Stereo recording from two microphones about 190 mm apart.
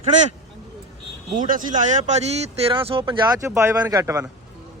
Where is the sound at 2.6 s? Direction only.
30° right (ahead or behind).